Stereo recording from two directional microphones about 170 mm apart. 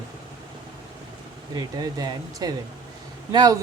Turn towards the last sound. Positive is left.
turn(degrees=-25)  # may be behind; listen again after turning